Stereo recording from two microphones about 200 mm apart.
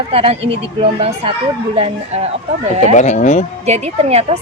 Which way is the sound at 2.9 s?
35° left (ahead or behind).